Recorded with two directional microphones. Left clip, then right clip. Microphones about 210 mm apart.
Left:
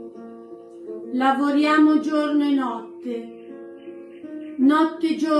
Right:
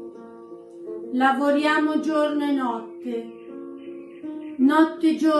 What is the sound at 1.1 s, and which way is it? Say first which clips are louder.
Speech: even; 20° right (ahead or behind).